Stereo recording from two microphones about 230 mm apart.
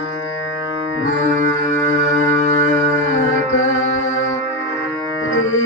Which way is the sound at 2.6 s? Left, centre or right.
Centre.